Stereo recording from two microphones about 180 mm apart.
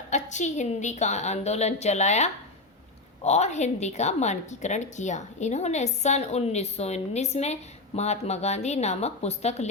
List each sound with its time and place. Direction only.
0.1 s a woman's voice: 40° left (ahead or behind)